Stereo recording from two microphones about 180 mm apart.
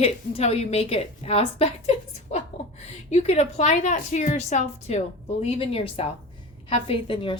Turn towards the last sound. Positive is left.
turn(degrees=30)  # may be behind; listen again after turning